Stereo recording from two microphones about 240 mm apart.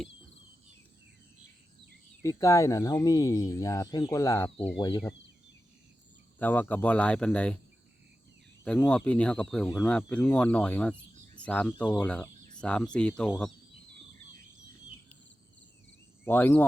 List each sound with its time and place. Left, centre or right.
2.2 s speech: centre
6.4 s speech: centre
8.6 s speech: centre
16.2 s speech: centre